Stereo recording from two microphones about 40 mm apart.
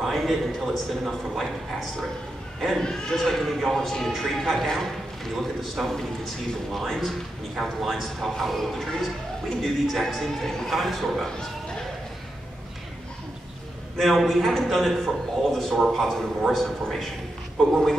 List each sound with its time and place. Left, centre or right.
0.0 s a sound: centre
1.0 s a man's voice: centre
2.6 s a man's voice: centre
11.2 s speech: centre
13.9 s a man's voice: centre